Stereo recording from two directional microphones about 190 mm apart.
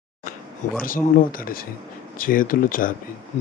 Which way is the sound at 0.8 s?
50° left (ahead or behind).